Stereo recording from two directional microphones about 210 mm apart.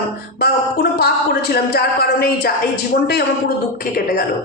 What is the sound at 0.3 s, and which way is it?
Speech, 50° left (ahead or behind).